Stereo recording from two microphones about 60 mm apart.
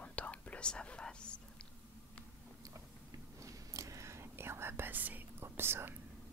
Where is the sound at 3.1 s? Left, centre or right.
Right.